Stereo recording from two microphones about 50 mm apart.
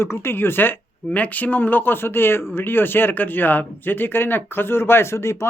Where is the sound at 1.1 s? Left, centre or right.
Left.